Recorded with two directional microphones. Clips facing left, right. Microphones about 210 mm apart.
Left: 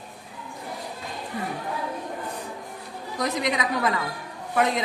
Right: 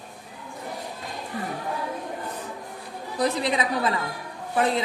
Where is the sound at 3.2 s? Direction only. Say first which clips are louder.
Right 2 dB; 30° right (ahead or behind).